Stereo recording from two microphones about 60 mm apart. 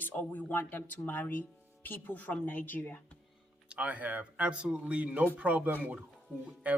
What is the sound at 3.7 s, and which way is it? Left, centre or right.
Speech, right.